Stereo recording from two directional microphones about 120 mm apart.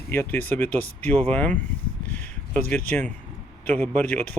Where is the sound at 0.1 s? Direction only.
15° left (ahead or behind).